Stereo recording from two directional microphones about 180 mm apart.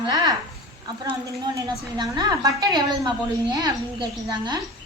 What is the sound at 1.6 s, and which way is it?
A woman's voice, 25° right (ahead or behind).